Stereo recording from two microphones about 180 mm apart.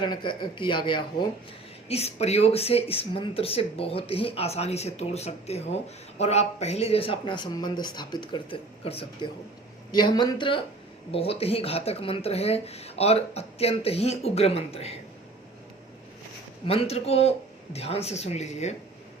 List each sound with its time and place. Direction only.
0.0 s speech: 25° left (ahead or behind)
16.6 s speech: 35° left (ahead or behind)